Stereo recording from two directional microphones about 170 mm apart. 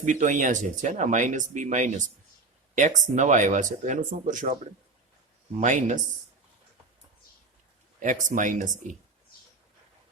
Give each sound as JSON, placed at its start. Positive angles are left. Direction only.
{"t": 0.0, "sound": "speech", "side_deg": -45}
{"t": 5.5, "sound": "speech", "side_deg": -45}
{"t": 7.9, "sound": "speech", "side_deg": -50}